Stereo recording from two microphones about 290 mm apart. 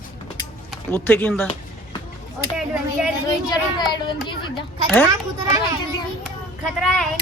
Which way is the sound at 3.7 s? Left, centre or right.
Centre.